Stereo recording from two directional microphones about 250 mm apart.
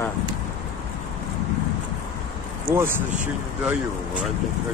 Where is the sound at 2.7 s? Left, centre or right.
Centre.